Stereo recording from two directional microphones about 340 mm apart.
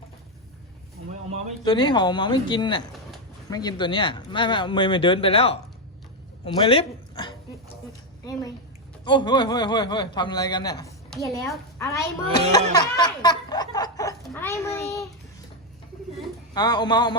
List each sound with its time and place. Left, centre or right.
1.6 s a man's voice: centre
8.2 s a sound: centre
9.0 s a man's voice: centre
12.7 s snicker: centre
16.6 s a man's voice: centre